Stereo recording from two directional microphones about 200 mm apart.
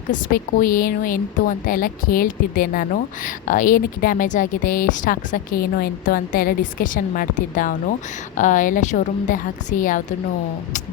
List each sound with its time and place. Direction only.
0.1 s a woman's voice: 45° left (ahead or behind)